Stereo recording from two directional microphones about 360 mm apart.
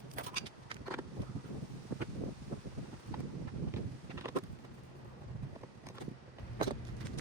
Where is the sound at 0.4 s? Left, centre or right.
Centre.